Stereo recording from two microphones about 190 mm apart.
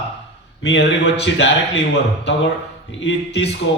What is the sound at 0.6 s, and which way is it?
A man's voice, 65° left (ahead or behind).